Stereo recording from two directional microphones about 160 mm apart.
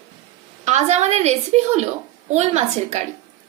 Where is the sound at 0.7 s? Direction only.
45° right (ahead or behind).